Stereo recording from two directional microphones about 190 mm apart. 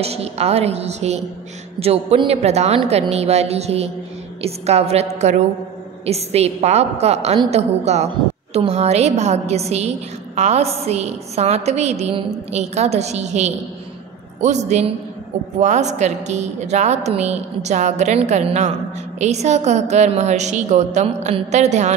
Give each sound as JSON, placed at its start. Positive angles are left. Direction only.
{"t": 0.0, "sound": "a woman's voice", "side_deg": -35}